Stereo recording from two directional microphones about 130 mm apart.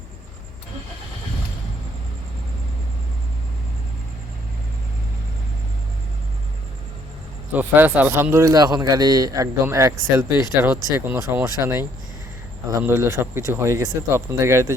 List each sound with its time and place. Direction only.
7.5 s speech: 15° right (ahead or behind)